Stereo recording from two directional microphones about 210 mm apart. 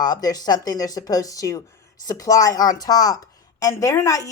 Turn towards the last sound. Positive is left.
turn(degrees=15)  # may be behind; listen again after turning